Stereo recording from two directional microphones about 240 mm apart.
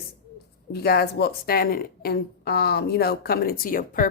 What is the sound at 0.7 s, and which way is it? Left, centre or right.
A woman's voice, left.